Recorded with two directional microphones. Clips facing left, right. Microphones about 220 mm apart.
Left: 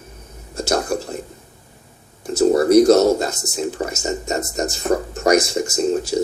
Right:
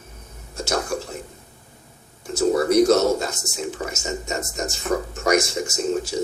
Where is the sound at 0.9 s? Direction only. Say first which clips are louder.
Left 4 dB; 40° left (ahead or behind).